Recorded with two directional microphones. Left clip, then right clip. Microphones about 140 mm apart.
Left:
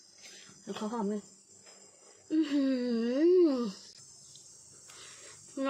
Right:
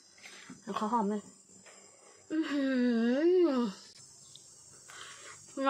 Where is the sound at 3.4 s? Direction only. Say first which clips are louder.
Left 1 dB; 25° left (ahead or behind).